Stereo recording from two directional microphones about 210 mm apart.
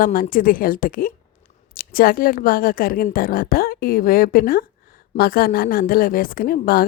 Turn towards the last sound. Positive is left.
turn(degrees=45)  # may be behind; listen again after turning